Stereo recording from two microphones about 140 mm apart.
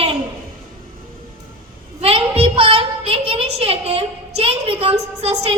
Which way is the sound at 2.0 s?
45° right (ahead or behind).